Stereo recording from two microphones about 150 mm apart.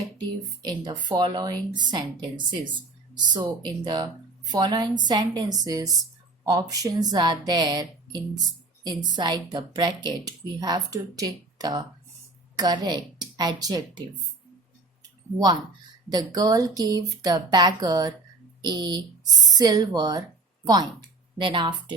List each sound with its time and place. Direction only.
0.6 s speech: 30° right (ahead or behind)
16.0 s speech: 25° right (ahead or behind)